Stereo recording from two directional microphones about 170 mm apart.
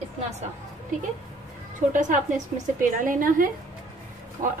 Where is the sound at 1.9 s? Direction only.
45° right (ahead or behind).